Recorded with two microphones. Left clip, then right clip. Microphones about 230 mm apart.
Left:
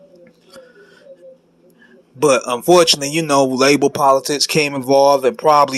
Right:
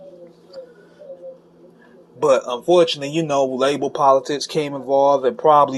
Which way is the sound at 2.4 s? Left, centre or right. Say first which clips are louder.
Left 4 dB; left.